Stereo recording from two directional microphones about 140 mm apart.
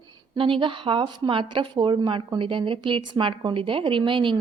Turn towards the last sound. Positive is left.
turn(degrees=-35)  # may be behind; listen again after turning